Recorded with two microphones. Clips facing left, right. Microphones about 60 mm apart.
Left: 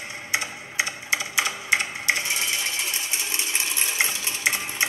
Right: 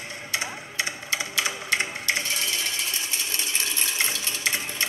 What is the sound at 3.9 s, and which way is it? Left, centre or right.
Stir, centre.